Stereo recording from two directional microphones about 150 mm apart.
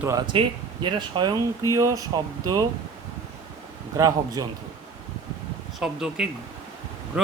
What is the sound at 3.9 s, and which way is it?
Speech, 25° right (ahead or behind).